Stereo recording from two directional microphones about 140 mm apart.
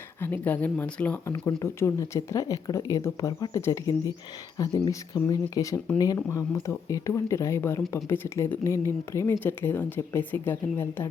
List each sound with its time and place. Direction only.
0.2 s speech: 15° left (ahead or behind)
1.3 s speech: 25° left (ahead or behind)